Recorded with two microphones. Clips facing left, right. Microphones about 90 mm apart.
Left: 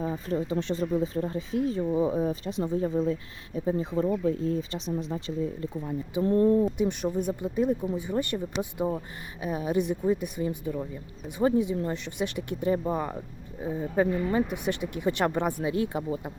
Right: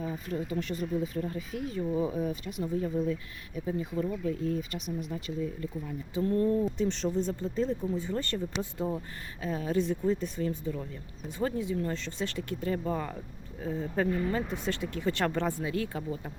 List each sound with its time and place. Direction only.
0.0 s speech: 35° left (ahead or behind)
6.7 s speech: 10° left (ahead or behind)